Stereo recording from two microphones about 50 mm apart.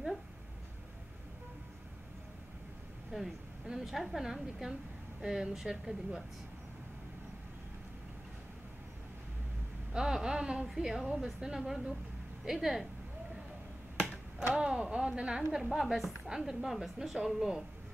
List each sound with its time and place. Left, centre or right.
3.1 s a woman's voice: centre
9.9 s a woman's voice: centre
14.5 s a woman's voice: centre